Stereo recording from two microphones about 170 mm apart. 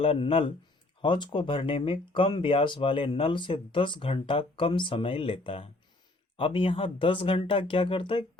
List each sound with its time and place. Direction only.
0.0 s speech: 35° left (ahead or behind)